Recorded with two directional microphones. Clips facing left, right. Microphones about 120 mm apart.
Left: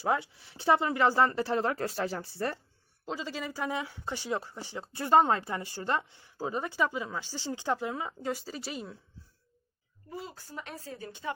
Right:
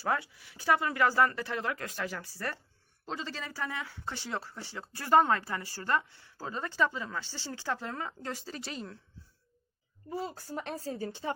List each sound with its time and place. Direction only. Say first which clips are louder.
0.0 s speech: left 2 dB; 20° left (ahead or behind)
3.1 s speech: left 3 dB; 10° left (ahead or behind)
10.1 s a woman's voice: right 5 dB; 40° right (ahead or behind)